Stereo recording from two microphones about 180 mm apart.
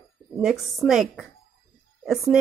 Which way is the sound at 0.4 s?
Centre (ahead or behind).